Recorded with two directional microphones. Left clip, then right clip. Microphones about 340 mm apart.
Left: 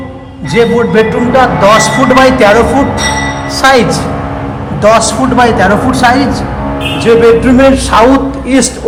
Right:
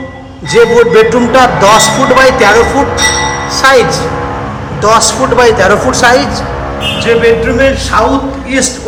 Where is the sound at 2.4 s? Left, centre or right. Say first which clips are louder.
Even; centre.